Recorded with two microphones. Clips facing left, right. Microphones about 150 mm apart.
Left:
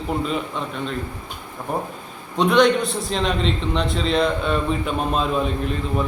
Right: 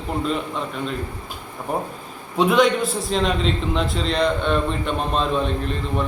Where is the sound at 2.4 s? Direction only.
5° right (ahead or behind).